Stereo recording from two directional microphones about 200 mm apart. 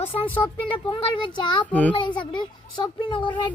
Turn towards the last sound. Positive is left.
turn(degrees=25)  # may be behind; listen again after turning